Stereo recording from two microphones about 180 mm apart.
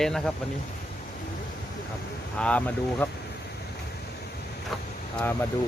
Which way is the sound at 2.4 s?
5° left (ahead or behind).